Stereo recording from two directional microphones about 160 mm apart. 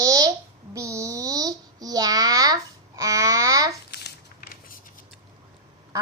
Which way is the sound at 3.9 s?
90° left.